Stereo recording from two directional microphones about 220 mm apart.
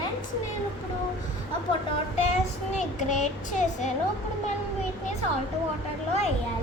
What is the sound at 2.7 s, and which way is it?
Speech, 35° left (ahead or behind).